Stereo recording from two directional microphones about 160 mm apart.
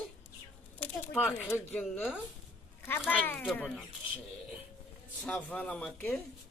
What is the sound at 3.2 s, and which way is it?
Speech, 10° left (ahead or behind).